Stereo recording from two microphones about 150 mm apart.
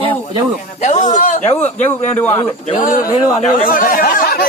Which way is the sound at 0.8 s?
50° left (ahead or behind).